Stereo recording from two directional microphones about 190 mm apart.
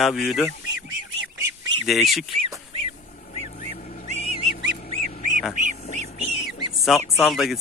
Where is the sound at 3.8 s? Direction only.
45° left (ahead or behind).